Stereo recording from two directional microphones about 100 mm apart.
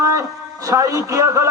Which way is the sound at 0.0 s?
35° right (ahead or behind).